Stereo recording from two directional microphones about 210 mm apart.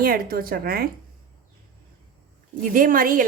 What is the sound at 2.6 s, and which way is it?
Speech, 40° right (ahead or behind).